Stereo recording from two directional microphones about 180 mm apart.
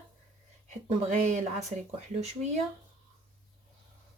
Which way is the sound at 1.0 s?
40° right (ahead or behind).